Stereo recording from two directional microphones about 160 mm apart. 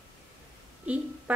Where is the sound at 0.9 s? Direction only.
10° right (ahead or behind).